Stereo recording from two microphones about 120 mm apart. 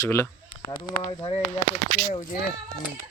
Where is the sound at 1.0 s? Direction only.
45° left (ahead or behind).